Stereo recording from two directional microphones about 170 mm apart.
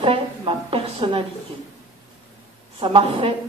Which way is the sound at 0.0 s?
30° right (ahead or behind).